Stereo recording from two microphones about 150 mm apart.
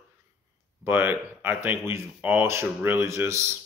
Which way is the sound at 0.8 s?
15° right (ahead or behind).